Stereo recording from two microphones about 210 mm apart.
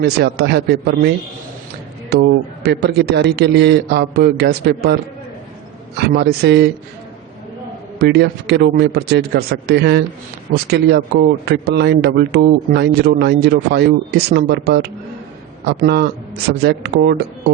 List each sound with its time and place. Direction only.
0.0 s speech: 50° right (ahead or behind)
2.1 s speech: 50° right (ahead or behind)
6.0 s speech: 50° right (ahead or behind)
7.9 s speech: 50° right (ahead or behind)